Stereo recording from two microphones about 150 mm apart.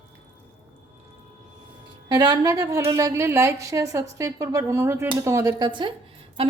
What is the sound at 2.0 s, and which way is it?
A woman's voice, 25° right (ahead or behind).